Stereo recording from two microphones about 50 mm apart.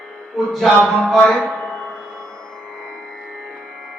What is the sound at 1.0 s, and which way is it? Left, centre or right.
Speech, centre.